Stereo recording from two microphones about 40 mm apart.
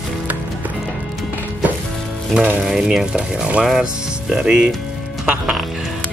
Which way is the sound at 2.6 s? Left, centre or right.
Centre.